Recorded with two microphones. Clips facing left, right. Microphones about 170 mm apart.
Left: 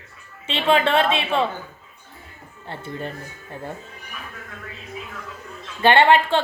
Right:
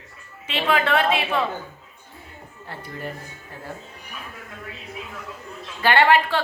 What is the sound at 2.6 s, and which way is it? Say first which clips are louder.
Speech: left 4 dB; 25° left (ahead or behind).